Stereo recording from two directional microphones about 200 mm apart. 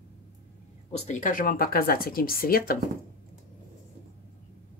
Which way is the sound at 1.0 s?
40° left (ahead or behind).